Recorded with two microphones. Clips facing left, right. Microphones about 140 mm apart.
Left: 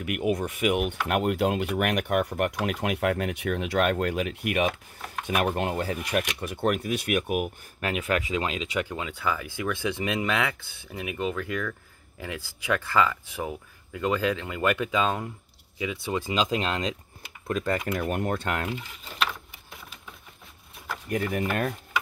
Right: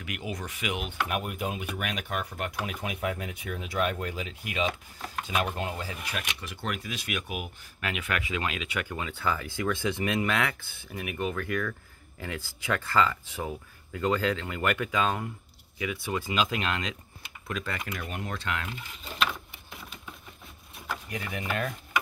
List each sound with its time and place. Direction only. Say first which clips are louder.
0.0 s speech: left 10 dB; 55° left (ahead or behind)
7.8 s speech: left 5 dB; 40° left (ahead or behind); by 11.6 s 15° left (ahead or behind)
12.6 s speech: left 2 dB; 15° left (ahead or behind); by 18.0 s 35° left (ahead or behind)
18.0 s speech: left 7 dB; 55° left (ahead or behind)
21.1 s speech: left 8 dB; 45° left (ahead or behind)